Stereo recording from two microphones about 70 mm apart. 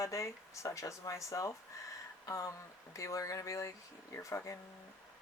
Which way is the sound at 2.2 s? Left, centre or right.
Left.